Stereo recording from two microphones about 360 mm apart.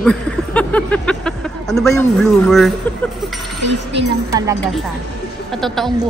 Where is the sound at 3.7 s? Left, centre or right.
Right.